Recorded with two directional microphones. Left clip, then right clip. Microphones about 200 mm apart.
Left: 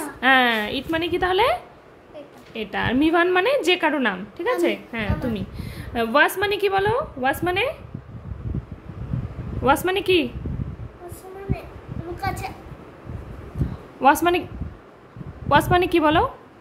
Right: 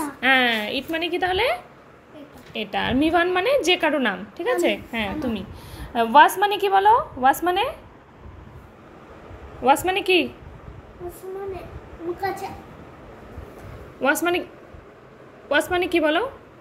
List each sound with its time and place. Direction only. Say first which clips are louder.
0.2 s a woman's voice: left 2 dB; 10° left (ahead or behind)
5.2 s a woman's voice: even; 15° left (ahead or behind)
9.6 s a woman's voice: right 1 dB; 20° left (ahead or behind)
14.0 s a woman's voice: left 4 dB; 15° left (ahead or behind)
15.4 s a woman's voice: left 4 dB; 20° left (ahead or behind)